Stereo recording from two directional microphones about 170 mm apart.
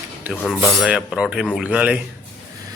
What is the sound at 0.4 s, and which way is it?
A man's voice, 5° right (ahead or behind).